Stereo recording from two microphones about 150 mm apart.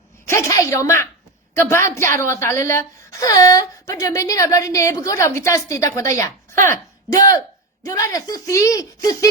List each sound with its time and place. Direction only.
0.3 s a woman's voice: 20° left (ahead or behind)